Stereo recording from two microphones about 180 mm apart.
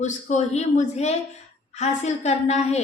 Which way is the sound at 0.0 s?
40° left (ahead or behind).